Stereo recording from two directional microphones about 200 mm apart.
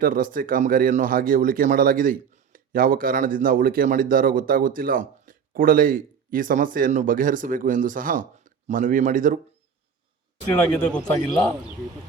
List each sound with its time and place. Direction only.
0.0 s speech: 45° right (ahead or behind)
10.5 s a man's voice: 5° left (ahead or behind)